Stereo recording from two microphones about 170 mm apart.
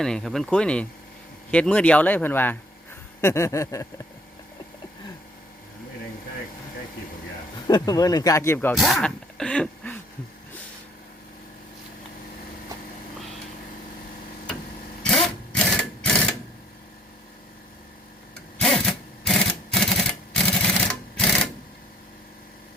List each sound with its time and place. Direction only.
0.0 s speech: 5° left (ahead or behind)
7.7 s speech: 20° left (ahead or behind)
8.7 s speech: centre (ahead or behind)
15.0 s a sound: 5° left (ahead or behind)
18.5 s sewing machine: 5° left (ahead or behind)